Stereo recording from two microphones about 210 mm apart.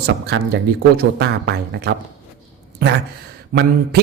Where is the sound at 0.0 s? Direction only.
50° right (ahead or behind).